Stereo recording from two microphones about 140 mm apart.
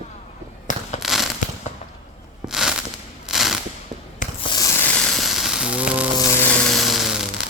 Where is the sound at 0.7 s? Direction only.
65° left (ahead or behind).